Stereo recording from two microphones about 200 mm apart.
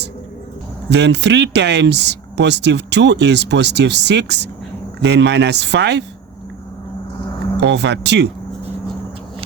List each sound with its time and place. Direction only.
0.9 s speech: 60° right (ahead or behind)
7.6 s speech: 60° right (ahead or behind)